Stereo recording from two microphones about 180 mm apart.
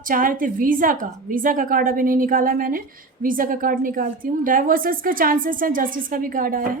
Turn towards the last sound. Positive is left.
turn(degrees=-50)  # may be behind; listen again after turning